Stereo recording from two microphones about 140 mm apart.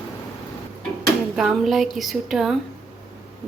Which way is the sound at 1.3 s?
Centre (ahead or behind).